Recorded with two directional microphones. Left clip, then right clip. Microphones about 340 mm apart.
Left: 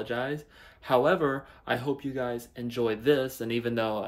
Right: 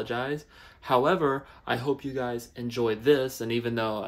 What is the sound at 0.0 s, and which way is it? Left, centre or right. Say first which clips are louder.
Speech: right 1 dB; centre.